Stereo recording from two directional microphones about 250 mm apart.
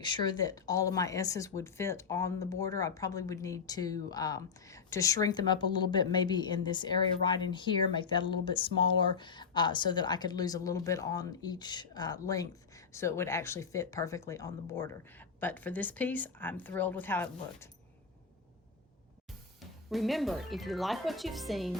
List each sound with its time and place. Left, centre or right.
0.0 s speech: centre
19.9 s speech: centre